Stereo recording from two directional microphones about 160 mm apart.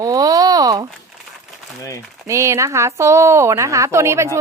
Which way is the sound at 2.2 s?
20° right (ahead or behind).